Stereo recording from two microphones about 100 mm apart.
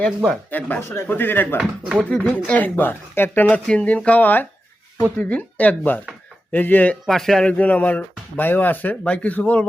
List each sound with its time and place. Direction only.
0.5 s speech: 20° left (ahead or behind)
1.5 s speech: 15° right (ahead or behind)
2.0 s speech: 10° left (ahead or behind)
7.0 s speech: 5° left (ahead or behind)